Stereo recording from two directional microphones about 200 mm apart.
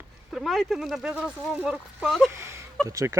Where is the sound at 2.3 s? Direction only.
15° right (ahead or behind).